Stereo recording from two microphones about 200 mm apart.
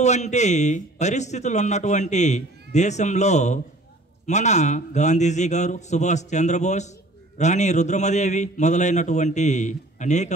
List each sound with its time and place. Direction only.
0.0 s a man's voice: 35° left (ahead or behind)